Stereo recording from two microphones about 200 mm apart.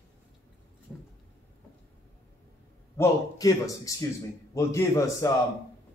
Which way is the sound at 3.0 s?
15° left (ahead or behind).